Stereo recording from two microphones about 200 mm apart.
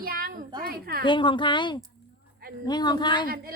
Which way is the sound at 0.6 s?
50° right (ahead or behind).